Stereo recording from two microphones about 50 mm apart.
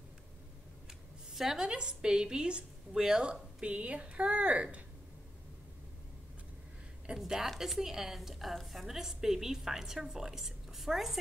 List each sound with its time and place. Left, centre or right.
1.3 s a woman's voice: centre
3.6 s speech: right
7.2 s a woman's voice: centre